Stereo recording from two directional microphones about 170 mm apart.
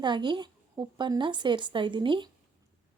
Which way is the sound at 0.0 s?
25° right (ahead or behind).